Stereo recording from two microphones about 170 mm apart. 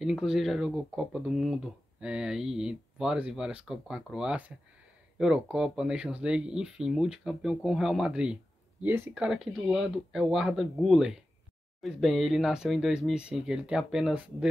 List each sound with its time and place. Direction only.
0.0 s speech: 5° right (ahead or behind)